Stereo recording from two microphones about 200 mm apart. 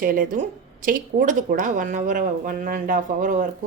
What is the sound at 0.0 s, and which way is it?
A woman's voice, 45° right (ahead or behind).